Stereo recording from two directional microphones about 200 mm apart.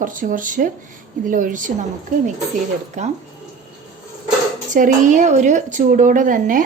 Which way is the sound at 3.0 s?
35° right (ahead or behind).